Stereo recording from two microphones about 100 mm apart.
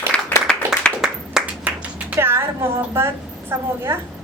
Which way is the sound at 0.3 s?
15° left (ahead or behind).